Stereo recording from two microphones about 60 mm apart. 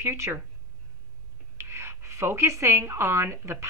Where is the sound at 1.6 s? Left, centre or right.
Right.